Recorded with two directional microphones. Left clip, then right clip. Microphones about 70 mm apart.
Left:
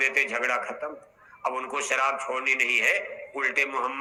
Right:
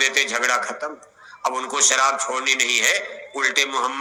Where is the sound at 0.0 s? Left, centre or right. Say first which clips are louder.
Right 5 dB; right.